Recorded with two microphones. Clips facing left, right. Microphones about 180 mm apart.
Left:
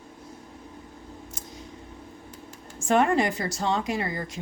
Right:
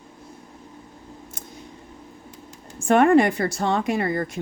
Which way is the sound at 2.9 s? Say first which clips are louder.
Right 6 dB; 55° right (ahead or behind).